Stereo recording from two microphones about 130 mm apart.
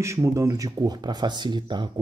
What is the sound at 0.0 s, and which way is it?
Speech, 20° right (ahead or behind).